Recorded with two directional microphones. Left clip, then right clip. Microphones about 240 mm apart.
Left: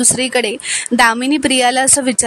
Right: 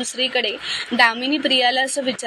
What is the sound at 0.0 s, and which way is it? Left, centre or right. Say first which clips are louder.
A woman's voice: left 5 dB; left.